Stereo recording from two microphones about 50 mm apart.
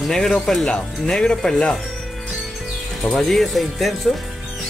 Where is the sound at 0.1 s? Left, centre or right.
Centre.